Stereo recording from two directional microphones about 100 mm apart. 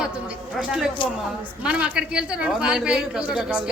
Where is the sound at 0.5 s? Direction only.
5° right (ahead or behind).